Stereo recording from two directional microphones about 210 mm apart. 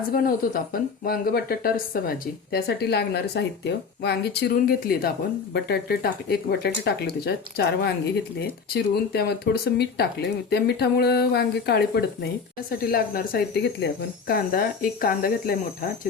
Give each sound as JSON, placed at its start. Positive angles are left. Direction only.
{"t": 0.1, "sound": "speech", "side_deg": 45}